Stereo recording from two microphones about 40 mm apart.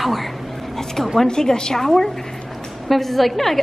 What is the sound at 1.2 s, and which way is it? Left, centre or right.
Speech, centre.